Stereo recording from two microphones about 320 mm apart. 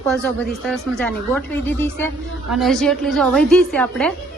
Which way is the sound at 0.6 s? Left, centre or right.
Centre.